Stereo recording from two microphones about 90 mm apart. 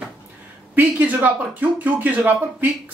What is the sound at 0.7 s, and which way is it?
Speech, 20° right (ahead or behind).